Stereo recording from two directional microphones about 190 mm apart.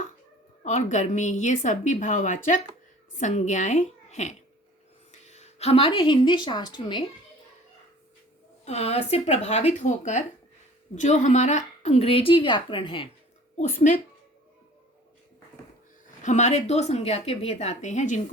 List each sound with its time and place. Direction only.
0.6 s a woman's voice: 40° left (ahead or behind)
8.6 s a woman's voice: 35° left (ahead or behind)
13.6 s a woman's voice: 45° left (ahead or behind)
16.2 s a woman's voice: 40° left (ahead or behind)